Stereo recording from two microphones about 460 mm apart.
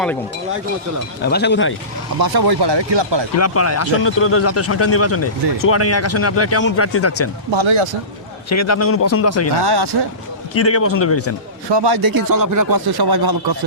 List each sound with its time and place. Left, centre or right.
1.2 s speech: left
2.1 s speech: right
3.3 s speech: left
7.5 s speech: right
8.4 s a man's voice: left
9.6 s speech: right
10.5 s speech: left
11.7 s speech: right